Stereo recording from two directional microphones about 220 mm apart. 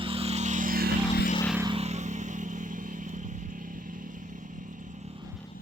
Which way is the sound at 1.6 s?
25° right (ahead or behind).